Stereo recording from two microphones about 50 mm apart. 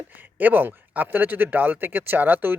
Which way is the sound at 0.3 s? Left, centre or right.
Right.